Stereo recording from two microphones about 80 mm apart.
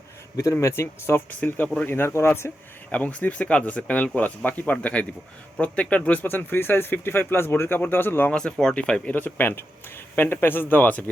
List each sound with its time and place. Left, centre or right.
0.6 s speech: left
2.9 s speech: centre
6.2 s speech: left
8.3 s speech: centre